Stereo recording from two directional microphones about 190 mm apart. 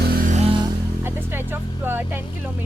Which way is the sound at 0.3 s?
35° right (ahead or behind).